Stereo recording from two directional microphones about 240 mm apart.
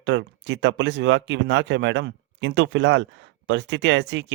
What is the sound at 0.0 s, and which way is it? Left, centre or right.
Speech, right.